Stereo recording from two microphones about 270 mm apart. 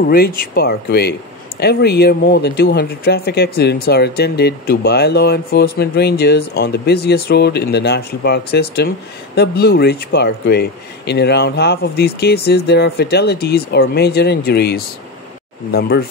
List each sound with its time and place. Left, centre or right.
0.0 s speech: left